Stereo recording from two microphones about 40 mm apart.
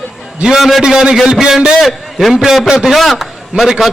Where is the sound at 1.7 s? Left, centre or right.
Centre.